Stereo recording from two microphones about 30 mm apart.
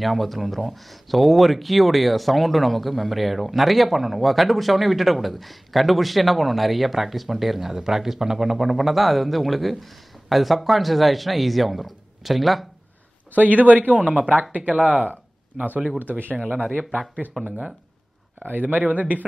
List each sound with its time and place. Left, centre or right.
0.0 s speech: centre
13.4 s a man's voice: right
15.5 s speech: right
16.5 s speech: left
17.4 s speech: centre
18.5 s a man's voice: right